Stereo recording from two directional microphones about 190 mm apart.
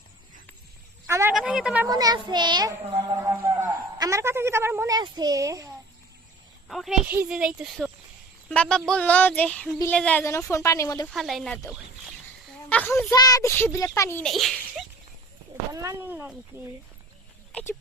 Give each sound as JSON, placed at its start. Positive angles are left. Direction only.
{"t": 1.0, "sound": "speech", "side_deg": -15}
{"t": 1.3, "sound": "speech", "side_deg": -5}
{"t": 1.9, "sound": "a child's voice", "side_deg": -20}
{"t": 6.7, "sound": "a woman's voice", "side_deg": 0}
{"t": 11.1, "sound": "speech", "side_deg": 0}
{"t": 12.6, "sound": "a woman's voice", "side_deg": 10}
{"t": 14.3, "sound": "a child's voice", "side_deg": 0}
{"t": 15.7, "sound": "speech", "side_deg": -15}